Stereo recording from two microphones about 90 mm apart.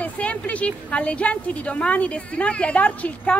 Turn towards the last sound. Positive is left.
turn(degrees=15)  # may be behind; listen again after turning